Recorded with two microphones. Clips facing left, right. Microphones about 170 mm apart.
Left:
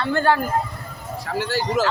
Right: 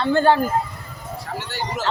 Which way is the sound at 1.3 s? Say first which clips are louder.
Left 8 dB; 90° left.